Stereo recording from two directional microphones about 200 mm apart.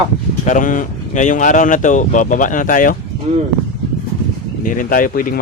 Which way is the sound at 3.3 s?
40° right (ahead or behind).